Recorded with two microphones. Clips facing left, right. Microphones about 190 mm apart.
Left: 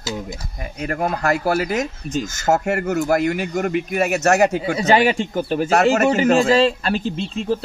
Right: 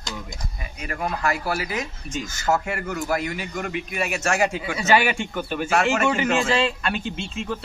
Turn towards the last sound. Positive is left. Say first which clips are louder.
# left 7 dB
turn(degrees=35)  # may be behind; listen again after turning